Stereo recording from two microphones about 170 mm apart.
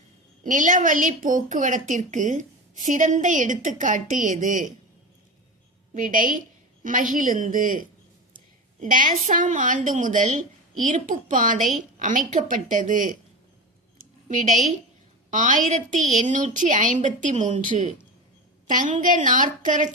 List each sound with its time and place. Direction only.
0.4 s a woman's voice: 50° right (ahead or behind)
5.9 s a woman's voice: 50° right (ahead or behind)
14.0 s a sound: 50° right (ahead or behind)
15.3 s a woman's voice: 50° right (ahead or behind)